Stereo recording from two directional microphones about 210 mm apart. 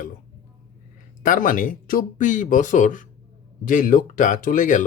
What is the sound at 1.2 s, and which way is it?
Speech, 40° left (ahead or behind).